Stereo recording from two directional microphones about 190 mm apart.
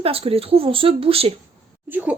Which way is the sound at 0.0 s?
30° right (ahead or behind).